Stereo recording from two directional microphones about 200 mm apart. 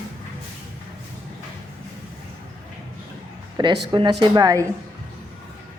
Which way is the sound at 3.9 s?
25° right (ahead or behind).